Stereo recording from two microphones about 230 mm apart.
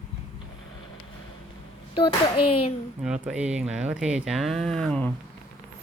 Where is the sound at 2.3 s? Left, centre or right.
Left.